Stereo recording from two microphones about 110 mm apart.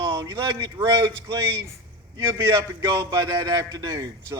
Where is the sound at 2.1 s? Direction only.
30° right (ahead or behind).